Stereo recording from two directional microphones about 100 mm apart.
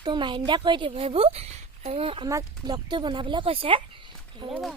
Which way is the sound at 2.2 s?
40° right (ahead or behind).